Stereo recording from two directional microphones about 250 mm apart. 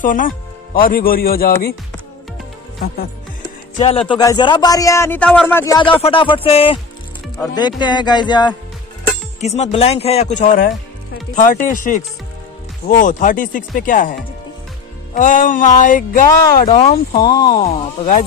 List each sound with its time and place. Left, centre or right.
0.0 s speech: left
3.7 s speech: left
15.1 s speech: left